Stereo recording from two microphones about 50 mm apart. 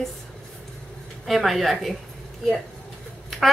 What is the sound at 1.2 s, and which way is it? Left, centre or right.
Speech, centre.